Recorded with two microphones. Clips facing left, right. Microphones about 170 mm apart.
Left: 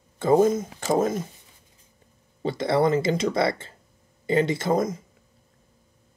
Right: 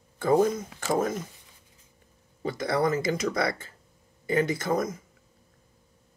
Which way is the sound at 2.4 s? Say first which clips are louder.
Left 4 dB; 25° left (ahead or behind).